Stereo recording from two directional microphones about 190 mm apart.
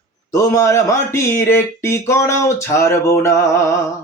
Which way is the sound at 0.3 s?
15° left (ahead or behind).